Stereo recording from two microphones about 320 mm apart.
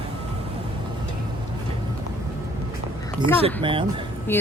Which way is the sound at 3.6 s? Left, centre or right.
Centre.